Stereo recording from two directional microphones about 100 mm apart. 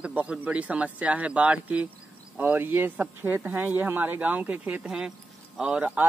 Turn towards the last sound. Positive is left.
turn(degrees=-20)  # may be behind; listen again after turning